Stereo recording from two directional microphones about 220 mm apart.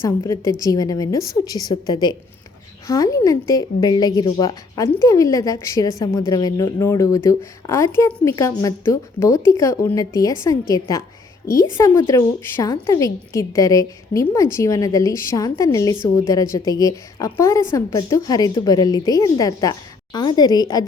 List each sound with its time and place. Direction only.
0.0 s speech: 15° left (ahead or behind)